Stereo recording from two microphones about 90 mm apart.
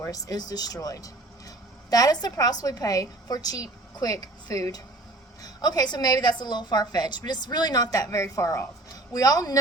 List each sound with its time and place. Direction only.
0.0 s a woman's voice: 40° left (ahead or behind)